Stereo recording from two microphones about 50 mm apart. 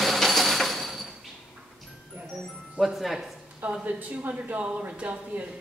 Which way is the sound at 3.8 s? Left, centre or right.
Right.